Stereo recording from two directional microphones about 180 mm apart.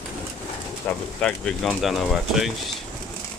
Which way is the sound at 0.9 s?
5° left (ahead or behind).